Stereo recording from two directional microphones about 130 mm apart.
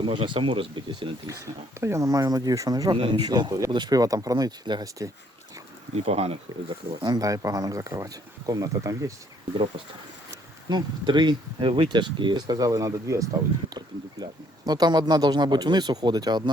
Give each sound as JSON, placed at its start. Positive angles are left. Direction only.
{"t": 0.0, "sound": "speech", "side_deg": -40}
{"t": 1.8, "sound": "speech", "side_deg": -20}
{"t": 6.1, "sound": "speech", "side_deg": -50}
{"t": 7.0, "sound": "speech", "side_deg": -30}
{"t": 10.7, "sound": "speech", "side_deg": -35}